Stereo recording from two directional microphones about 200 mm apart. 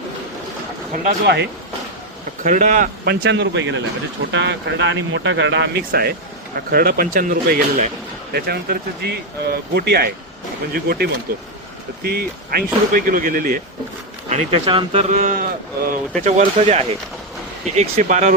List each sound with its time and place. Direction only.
0.9 s speech: 50° right (ahead or behind)
2.4 s speech: 40° right (ahead or behind); by 5.6 s 65° right (ahead or behind)
5.9 s speech: 50° right (ahead or behind)
14.3 s speech: 30° right (ahead or behind)
15.1 s speech: 40° right (ahead or behind)
16.2 s speech: 35° right (ahead or behind)